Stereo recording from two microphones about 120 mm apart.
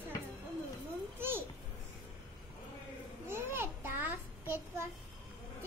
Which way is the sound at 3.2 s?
20° right (ahead or behind).